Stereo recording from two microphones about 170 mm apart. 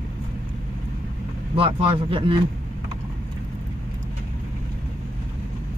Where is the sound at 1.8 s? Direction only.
30° right (ahead or behind).